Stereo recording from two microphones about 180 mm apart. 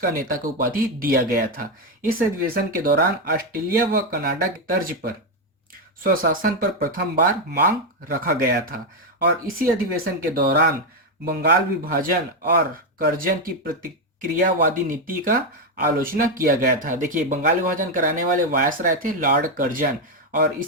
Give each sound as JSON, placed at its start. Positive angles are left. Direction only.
{"t": 0.0, "sound": "speech", "side_deg": -50}